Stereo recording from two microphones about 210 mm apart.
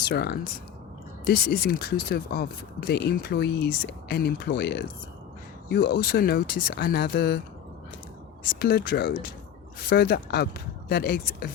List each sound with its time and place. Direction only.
0.0 s speech: 50° left (ahead or behind)
8.5 s speech: 45° left (ahead or behind)